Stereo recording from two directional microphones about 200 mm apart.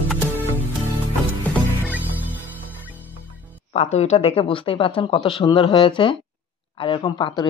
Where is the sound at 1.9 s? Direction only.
10° right (ahead or behind).